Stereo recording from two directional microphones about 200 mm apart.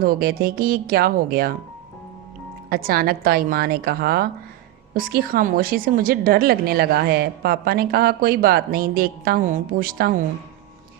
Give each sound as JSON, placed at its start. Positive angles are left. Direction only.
{"t": 0.0, "sound": "a woman's voice", "side_deg": -50}
{"t": 2.6, "sound": "a woman's voice", "side_deg": -45}